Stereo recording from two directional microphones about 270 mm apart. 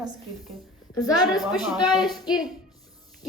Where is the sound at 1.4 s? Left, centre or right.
Centre.